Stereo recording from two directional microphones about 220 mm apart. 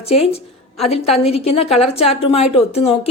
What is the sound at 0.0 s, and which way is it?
A woman's voice, 25° left (ahead or behind).